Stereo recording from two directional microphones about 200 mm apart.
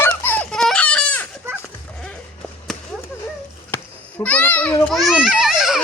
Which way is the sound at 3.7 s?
10° left (ahead or behind).